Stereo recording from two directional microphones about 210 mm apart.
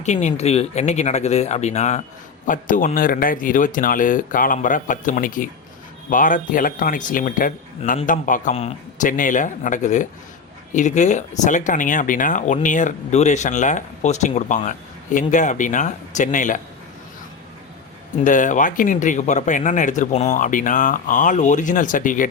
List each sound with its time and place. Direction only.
0.0 s speech: 35° left (ahead or behind)
18.2 s speech: 35° left (ahead or behind)